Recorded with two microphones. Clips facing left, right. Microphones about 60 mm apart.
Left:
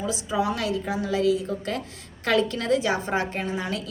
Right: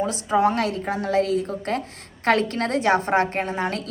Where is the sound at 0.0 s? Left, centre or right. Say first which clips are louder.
Right 6 dB; right.